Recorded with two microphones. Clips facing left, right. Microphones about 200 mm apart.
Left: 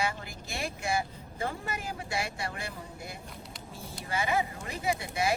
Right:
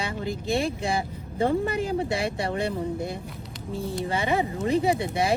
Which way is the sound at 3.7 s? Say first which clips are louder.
Right 16 dB; 60° right (ahead or behind).